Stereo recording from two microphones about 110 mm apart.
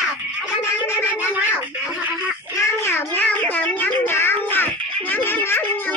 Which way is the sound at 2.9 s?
20° left (ahead or behind).